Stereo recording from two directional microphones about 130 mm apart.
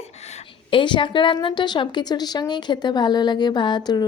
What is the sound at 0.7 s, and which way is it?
A woman's voice, 40° left (ahead or behind).